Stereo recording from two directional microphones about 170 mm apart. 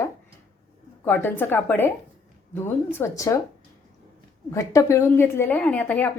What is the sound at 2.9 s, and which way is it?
Speech, 15° left (ahead or behind).